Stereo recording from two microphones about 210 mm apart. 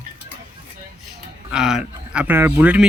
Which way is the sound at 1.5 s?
5° right (ahead or behind).